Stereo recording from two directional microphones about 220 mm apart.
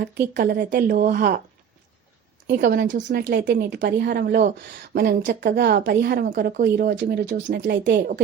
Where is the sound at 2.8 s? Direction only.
55° right (ahead or behind).